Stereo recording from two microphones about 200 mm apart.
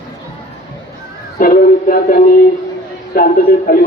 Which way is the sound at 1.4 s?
45° left (ahead or behind).